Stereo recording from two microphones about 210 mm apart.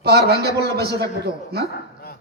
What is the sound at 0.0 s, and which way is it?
A man's voice, 50° right (ahead or behind).